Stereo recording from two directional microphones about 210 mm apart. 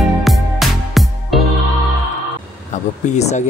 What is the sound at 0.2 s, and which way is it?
Music, centre (ahead or behind).